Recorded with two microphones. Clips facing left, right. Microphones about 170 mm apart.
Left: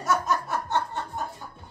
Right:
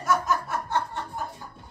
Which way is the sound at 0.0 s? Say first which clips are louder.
Even; 25° left (ahead or behind).